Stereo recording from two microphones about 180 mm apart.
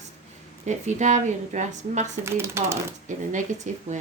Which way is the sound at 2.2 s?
15° right (ahead or behind).